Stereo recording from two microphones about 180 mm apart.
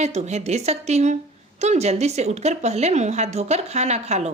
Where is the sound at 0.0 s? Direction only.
40° right (ahead or behind).